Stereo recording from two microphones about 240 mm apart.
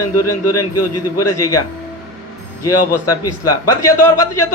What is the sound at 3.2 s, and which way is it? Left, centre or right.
Speech, left.